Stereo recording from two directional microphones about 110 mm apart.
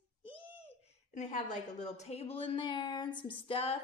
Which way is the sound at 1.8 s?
85° left.